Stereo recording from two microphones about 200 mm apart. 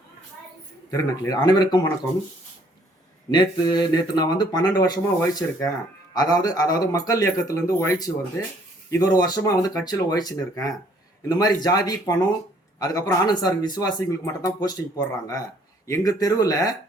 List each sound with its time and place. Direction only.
0.9 s speech: 15° left (ahead or behind)
3.3 s a man's voice: 20° left (ahead or behind)